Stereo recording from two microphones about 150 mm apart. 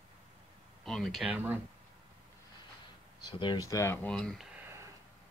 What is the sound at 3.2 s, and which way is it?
Speech, 30° left (ahead or behind).